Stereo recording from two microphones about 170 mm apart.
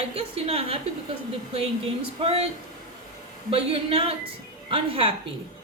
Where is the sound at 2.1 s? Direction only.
35° right (ahead or behind).